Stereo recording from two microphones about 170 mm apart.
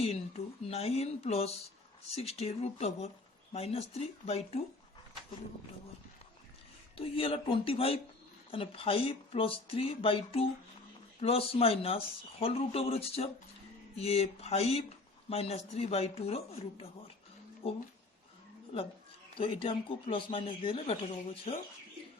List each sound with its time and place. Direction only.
0.0 s speech: 35° left (ahead or behind)
6.9 s speech: 35° left (ahead or behind)